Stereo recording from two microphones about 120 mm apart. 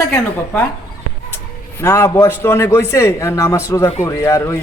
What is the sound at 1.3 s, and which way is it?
A man's voice, 20° left (ahead or behind).